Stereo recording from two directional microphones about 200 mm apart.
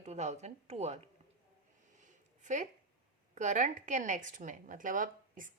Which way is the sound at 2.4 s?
35° right (ahead or behind).